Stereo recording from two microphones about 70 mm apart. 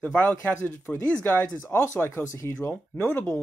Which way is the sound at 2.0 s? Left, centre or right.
Left.